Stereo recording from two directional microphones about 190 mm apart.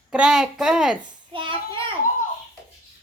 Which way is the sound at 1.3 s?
25° right (ahead or behind).